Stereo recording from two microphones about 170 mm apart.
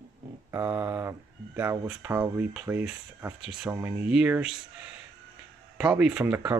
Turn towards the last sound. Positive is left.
turn(degrees=-10)  # may be behind; listen again after turning